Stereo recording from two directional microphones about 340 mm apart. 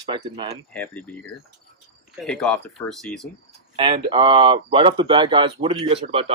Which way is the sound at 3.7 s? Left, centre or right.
Centre.